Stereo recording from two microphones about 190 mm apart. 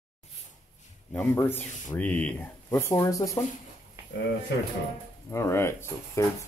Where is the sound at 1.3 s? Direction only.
15° left (ahead or behind).